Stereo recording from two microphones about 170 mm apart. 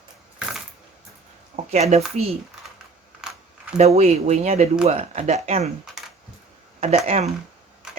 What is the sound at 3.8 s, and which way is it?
Speech, 40° right (ahead or behind).